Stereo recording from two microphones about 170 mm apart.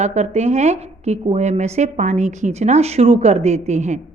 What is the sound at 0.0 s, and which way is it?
A woman's voice, 40° right (ahead or behind).